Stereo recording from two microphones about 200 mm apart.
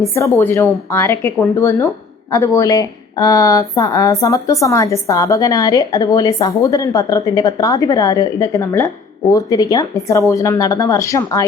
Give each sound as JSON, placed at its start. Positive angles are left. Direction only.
{"t": 0.0, "sound": "speech", "side_deg": 15}